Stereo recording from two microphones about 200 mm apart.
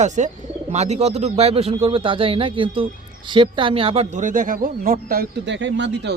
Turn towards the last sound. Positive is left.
turn(degrees=-60)  # may be behind; listen again after turning